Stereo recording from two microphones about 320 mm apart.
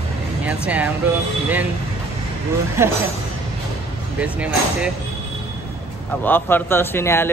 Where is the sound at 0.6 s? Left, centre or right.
Centre.